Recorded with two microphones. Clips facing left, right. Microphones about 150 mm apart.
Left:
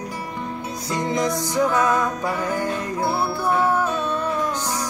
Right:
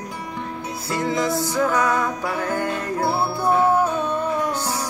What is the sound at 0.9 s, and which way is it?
Music, 20° left (ahead or behind).